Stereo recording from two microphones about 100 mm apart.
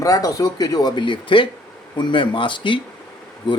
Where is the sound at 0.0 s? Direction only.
35° left (ahead or behind).